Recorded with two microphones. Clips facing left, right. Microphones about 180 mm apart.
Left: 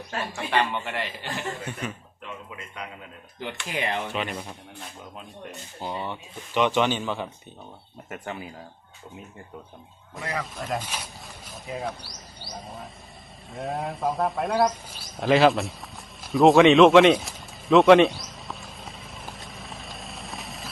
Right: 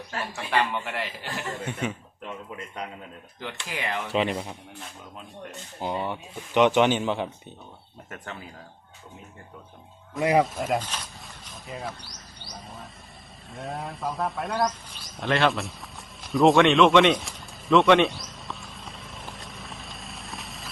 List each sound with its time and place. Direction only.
0.3 s a man's voice: 5° right (ahead or behind)
1.6 s a man's voice: 20° right (ahead or behind)
3.4 s speech: 20° left (ahead or behind)
4.1 s a man's voice: 30° right (ahead or behind)
5.8 s speech: 15° right (ahead or behind)
8.1 s speech: 15° left (ahead or behind)
10.5 s a man's voice: centre (ahead or behind)
10.8 s wild animals: 10° left (ahead or behind)
13.5 s bird: centre (ahead or behind)